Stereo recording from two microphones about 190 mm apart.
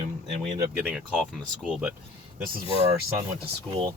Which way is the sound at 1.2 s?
Centre (ahead or behind).